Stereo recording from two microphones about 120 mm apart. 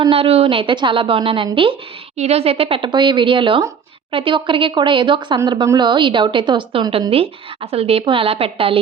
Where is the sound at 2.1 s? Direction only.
60° right (ahead or behind).